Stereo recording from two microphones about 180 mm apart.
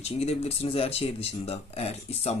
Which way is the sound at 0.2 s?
35° left (ahead or behind).